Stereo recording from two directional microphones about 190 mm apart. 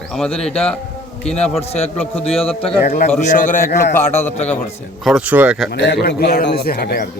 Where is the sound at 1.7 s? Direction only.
35° left (ahead or behind).